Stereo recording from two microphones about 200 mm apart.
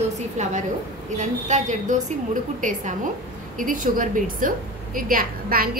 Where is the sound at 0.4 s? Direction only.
35° right (ahead or behind).